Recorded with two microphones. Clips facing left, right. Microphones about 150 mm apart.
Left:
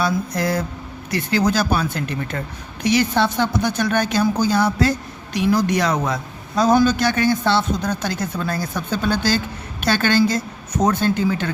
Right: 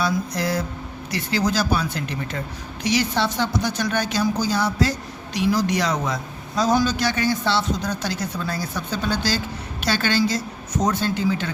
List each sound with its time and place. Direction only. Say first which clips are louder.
0.0 s a man's voice: left 2 dB; 50° left (ahead or behind)